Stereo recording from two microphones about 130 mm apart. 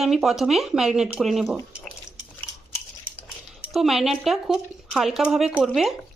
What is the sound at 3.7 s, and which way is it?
Speech, centre (ahead or behind).